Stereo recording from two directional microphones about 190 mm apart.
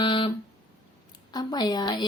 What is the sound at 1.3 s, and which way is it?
Speech, 20° left (ahead or behind).